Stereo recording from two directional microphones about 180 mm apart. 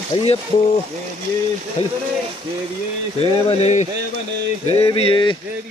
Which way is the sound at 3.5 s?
35° left (ahead or behind).